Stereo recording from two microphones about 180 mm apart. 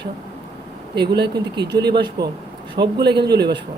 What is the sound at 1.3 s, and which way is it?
A man's voice, 25° right (ahead or behind).